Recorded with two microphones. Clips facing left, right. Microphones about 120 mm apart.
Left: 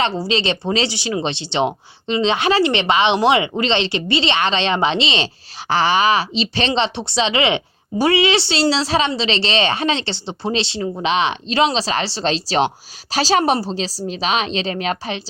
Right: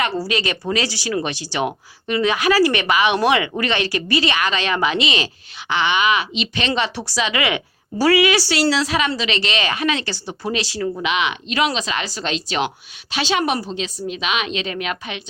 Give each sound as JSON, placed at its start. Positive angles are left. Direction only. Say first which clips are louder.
{"t": 0.0, "sound": "speech", "louder": "left 2 dB", "side_deg": 25}